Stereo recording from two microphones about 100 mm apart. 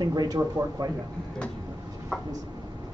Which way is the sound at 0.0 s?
40° right (ahead or behind).